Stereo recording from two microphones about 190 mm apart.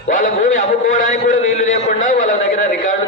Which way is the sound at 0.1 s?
40° left (ahead or behind).